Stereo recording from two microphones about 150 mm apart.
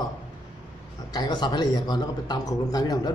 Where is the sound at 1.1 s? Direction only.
30° left (ahead or behind).